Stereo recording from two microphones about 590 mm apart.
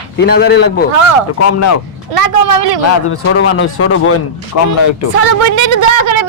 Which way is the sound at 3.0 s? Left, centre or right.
Left.